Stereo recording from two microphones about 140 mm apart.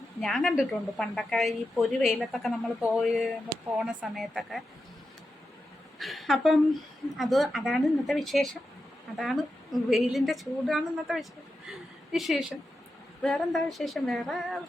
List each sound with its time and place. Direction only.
0.2 s a woman's voice: centre (ahead or behind)
6.0 s a woman's voice: centre (ahead or behind)